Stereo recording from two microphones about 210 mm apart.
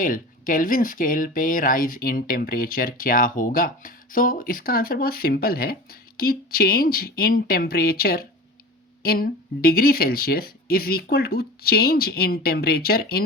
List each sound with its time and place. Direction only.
0.0 s speech: 40° left (ahead or behind)